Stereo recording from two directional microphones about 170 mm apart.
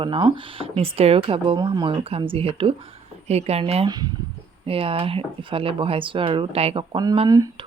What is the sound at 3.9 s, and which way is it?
Speech, 25° right (ahead or behind).